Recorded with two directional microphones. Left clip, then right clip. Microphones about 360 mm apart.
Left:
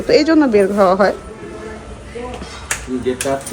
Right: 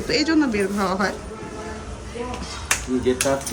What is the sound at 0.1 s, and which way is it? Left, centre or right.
Speech, centre.